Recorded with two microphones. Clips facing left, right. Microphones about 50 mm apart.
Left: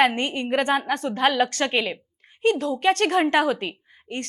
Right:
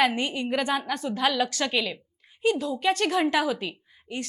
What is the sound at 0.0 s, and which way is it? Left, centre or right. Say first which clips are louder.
A woman's voice: left 3 dB; left.